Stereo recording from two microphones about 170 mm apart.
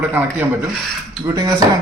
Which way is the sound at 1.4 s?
25° right (ahead or behind).